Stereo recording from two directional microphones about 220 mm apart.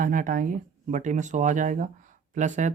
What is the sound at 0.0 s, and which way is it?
Speech, 40° right (ahead or behind).